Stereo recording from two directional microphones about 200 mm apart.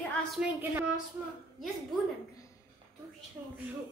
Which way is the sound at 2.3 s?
15° left (ahead or behind).